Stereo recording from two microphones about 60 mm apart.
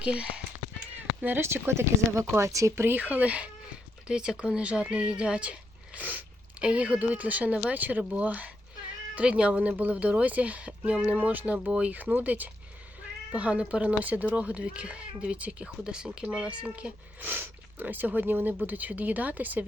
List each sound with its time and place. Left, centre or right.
0.0 s speech: centre
1.4 s speech: right
2.8 s speech: right
17.2 s speech: right